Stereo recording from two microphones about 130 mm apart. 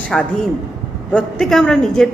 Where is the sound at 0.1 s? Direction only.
5° left (ahead or behind).